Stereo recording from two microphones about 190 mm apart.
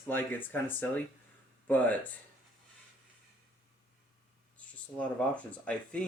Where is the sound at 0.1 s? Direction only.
10° left (ahead or behind).